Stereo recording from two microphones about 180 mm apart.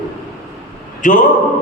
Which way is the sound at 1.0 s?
45° left (ahead or behind).